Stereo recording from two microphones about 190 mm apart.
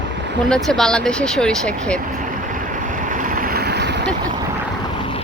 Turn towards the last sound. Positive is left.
turn(degrees=-60)  # may be behind; listen again after turning